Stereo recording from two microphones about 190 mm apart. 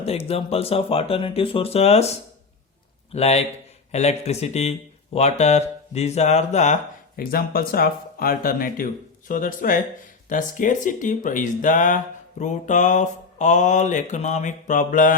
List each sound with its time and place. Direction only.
0.3 s speech: 30° left (ahead or behind)
7.2 s speech: 50° left (ahead or behind)